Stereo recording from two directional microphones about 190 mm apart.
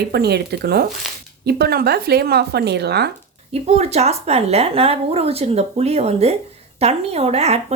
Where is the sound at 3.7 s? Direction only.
35° right (ahead or behind).